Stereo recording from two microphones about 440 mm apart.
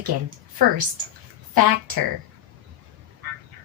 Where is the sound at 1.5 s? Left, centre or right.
Right.